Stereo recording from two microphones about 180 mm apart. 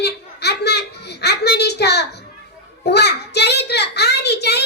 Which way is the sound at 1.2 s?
65° left (ahead or behind).